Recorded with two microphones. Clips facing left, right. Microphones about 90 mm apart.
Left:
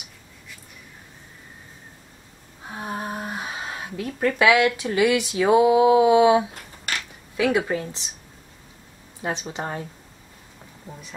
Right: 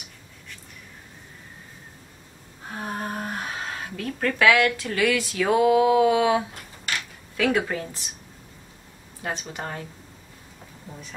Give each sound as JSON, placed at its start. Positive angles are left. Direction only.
{"t": 2.7, "sound": "a woman's voice", "side_deg": 10}
{"t": 8.0, "sound": "speech", "side_deg": 25}
{"t": 9.2, "sound": "speech", "side_deg": 20}